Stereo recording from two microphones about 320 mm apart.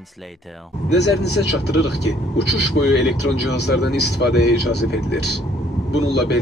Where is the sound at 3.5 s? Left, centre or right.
Left.